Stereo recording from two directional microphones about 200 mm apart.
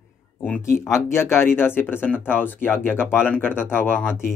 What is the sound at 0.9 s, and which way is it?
Speech, 15° left (ahead or behind).